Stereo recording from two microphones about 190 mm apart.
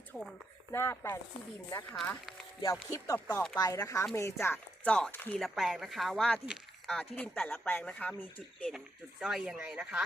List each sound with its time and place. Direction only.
0.1 s speech: centre (ahead or behind)
0.7 s speech: 15° left (ahead or behind)
2.9 s speech: 15° left (ahead or behind)
9.2 s speech: 5° right (ahead or behind)